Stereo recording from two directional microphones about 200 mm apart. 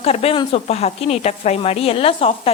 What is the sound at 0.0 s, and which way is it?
A woman's voice, 30° left (ahead or behind).